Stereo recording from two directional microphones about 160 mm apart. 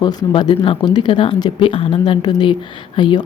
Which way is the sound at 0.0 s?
25° left (ahead or behind).